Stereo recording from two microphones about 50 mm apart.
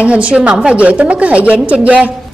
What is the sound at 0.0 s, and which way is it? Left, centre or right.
A woman's voice, right.